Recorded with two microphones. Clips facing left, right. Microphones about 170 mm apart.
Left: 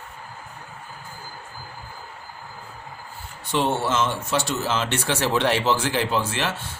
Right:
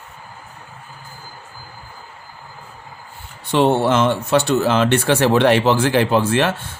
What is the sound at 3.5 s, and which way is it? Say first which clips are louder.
Speech: right 7 dB; 60° right (ahead or behind).